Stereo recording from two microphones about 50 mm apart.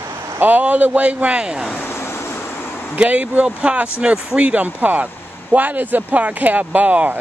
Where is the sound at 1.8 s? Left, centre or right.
Left.